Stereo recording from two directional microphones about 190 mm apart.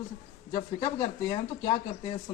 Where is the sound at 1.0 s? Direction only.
30° left (ahead or behind).